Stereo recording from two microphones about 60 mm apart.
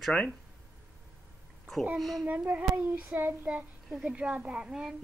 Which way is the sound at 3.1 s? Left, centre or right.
Right.